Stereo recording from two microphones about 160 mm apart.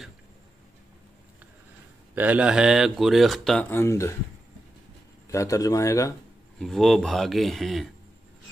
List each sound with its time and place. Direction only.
2.1 s speech: 10° right (ahead or behind)
3.7 s speech: 15° left (ahead or behind)
5.3 s speech: 20° left (ahead or behind)
6.6 s speech: centre (ahead or behind)